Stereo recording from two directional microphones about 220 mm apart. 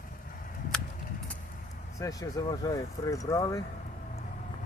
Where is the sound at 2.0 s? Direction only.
15° left (ahead or behind).